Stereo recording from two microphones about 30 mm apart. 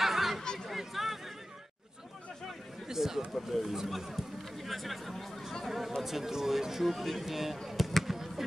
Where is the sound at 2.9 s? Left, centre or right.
Centre.